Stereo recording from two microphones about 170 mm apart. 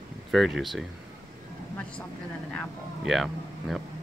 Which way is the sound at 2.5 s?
Centre (ahead or behind).